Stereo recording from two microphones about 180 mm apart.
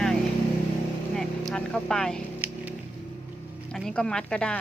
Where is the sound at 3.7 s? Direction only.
5° left (ahead or behind).